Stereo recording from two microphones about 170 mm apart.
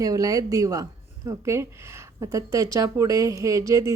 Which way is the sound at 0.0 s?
20° right (ahead or behind).